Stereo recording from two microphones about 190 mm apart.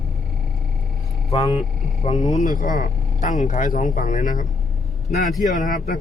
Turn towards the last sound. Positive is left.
turn(degrees=45)  # may be behind; listen again after turning